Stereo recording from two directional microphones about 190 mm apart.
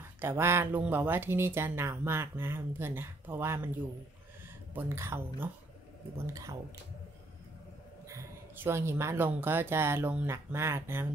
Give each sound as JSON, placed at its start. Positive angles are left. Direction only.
{"t": 0.2, "sound": "speech", "side_deg": -10}
{"t": 4.7, "sound": "speech", "side_deg": -10}
{"t": 8.1, "sound": "speech", "side_deg": -15}